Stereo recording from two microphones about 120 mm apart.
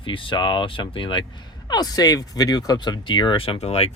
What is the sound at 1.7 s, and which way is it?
Speech, 35° left (ahead or behind).